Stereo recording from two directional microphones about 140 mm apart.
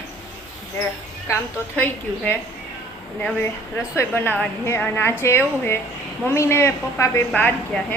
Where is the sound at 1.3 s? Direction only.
10° left (ahead or behind).